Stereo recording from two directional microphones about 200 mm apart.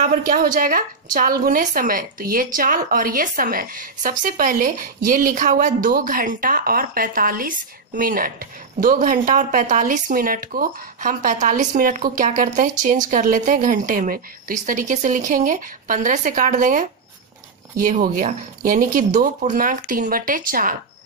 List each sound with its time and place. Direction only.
0.6 s speech: 45° right (ahead or behind)